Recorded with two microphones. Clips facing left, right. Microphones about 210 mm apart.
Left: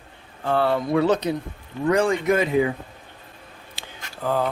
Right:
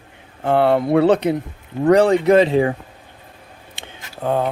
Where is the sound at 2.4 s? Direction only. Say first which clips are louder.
Right 4 dB; 30° right (ahead or behind).